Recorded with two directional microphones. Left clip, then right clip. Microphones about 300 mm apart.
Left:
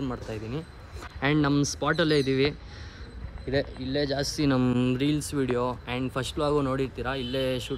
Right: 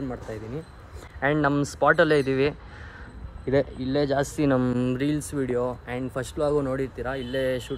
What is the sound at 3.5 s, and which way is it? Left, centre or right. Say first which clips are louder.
Speech: right 5 dB; right.